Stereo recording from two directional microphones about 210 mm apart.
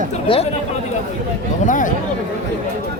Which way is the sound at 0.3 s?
25° left (ahead or behind).